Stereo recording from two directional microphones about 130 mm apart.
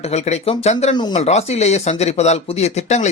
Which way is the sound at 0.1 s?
55° left (ahead or behind).